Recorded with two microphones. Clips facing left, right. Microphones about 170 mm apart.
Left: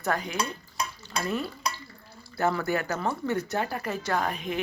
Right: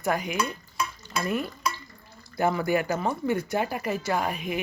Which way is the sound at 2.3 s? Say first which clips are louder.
Right 2 dB; 15° right (ahead or behind).